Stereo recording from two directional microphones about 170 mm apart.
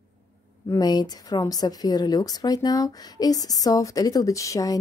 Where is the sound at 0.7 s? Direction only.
25° left (ahead or behind).